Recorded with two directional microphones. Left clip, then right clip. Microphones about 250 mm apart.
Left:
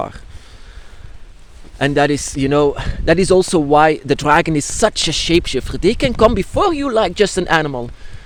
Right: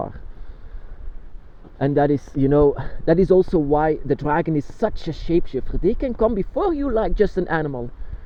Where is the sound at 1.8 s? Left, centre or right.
Centre.